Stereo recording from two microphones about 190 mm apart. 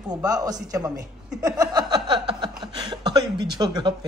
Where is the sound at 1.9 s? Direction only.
25° right (ahead or behind).